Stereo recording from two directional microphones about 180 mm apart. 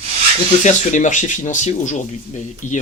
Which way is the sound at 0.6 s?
40° left (ahead or behind).